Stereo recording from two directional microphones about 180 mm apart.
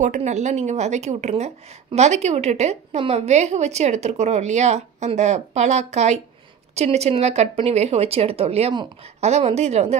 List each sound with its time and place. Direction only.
0.0 s a woman's voice: 40° right (ahead or behind)